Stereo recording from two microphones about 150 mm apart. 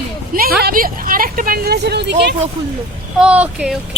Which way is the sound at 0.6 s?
70° right (ahead or behind).